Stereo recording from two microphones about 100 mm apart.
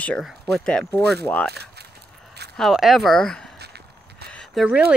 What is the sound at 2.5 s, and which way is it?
Speech, centre (ahead or behind).